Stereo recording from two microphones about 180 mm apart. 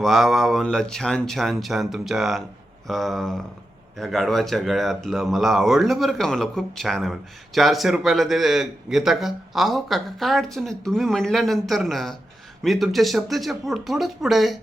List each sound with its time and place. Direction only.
0.0 s speech: centre (ahead or behind)